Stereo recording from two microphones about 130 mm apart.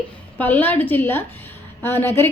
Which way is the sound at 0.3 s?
15° left (ahead or behind).